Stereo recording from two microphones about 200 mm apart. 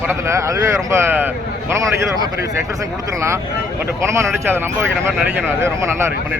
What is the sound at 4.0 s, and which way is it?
Speech, 15° right (ahead or behind).